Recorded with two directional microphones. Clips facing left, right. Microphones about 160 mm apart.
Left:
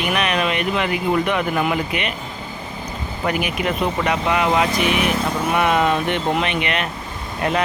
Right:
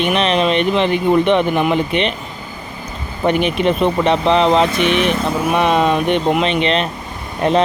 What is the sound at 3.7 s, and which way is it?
Speech, 25° right (ahead or behind).